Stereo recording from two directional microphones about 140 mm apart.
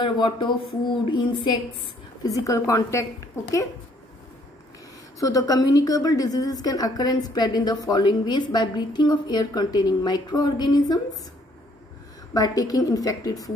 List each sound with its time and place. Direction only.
0.0 s a woman's voice: 35° left (ahead or behind)
2.2 s a woman's voice: 25° left (ahead or behind)
5.2 s a woman's voice: 25° left (ahead or behind)
12.4 s a woman's voice: 25° left (ahead or behind)